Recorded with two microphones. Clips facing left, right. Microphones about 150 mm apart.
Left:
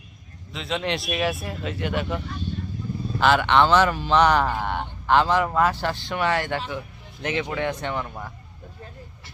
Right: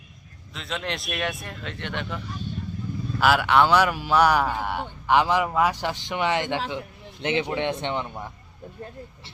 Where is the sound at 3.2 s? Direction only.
5° right (ahead or behind); by 8.1 s 25° right (ahead or behind).